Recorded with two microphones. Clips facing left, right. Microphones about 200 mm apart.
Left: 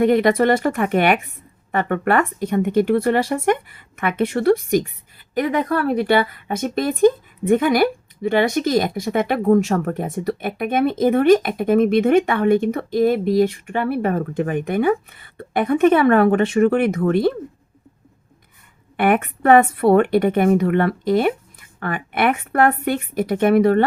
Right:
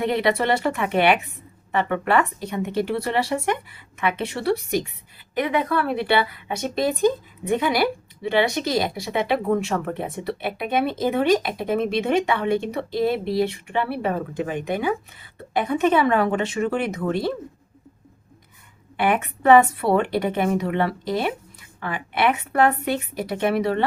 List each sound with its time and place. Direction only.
0.0 s a woman's voice: 45° left (ahead or behind)
18.9 s a woman's voice: 50° left (ahead or behind)